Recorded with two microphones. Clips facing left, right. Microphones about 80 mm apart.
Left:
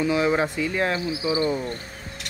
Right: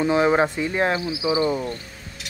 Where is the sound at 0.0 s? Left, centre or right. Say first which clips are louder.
Right 3 dB; right.